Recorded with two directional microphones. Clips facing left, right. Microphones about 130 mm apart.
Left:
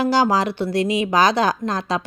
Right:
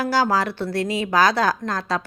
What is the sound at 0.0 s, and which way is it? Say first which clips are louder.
A woman's voice: left 3 dB; 20° left (ahead or behind).